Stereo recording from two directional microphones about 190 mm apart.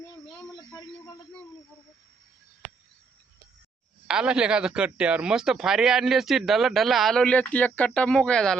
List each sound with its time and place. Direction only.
0.3 s insect: 20° left (ahead or behind)
4.0 s speech: 5° right (ahead or behind)